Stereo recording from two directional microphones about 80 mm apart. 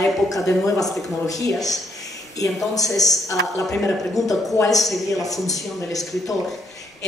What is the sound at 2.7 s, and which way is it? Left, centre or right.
Speech, left.